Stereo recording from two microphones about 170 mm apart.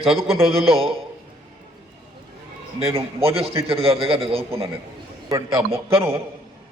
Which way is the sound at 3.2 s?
35° right (ahead or behind).